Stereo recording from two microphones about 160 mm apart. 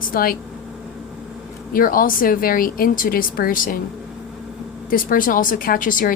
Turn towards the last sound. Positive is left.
turn(degrees=60)  # may be behind; listen again after turning